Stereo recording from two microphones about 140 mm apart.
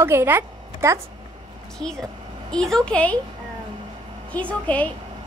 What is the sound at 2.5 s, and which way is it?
Speech, 5° left (ahead or behind).